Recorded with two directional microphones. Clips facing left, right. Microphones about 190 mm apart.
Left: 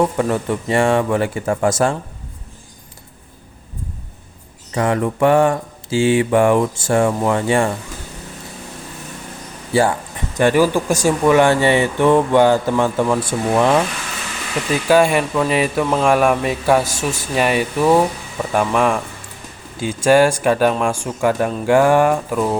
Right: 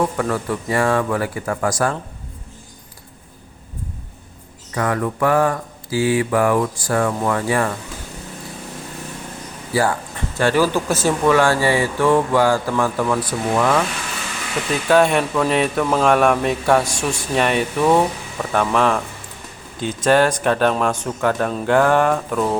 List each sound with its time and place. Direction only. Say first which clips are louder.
0.2 s speech: left 3 dB; 25° left (ahead or behind)
4.7 s speech: left 3 dB; 25° left (ahead or behind)
9.7 s speech: left 3 dB; 25° left (ahead or behind)
14.8 s speech: left 1 dB; 5° left (ahead or behind)